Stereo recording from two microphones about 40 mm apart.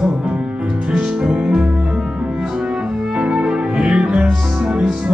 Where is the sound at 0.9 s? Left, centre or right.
Centre.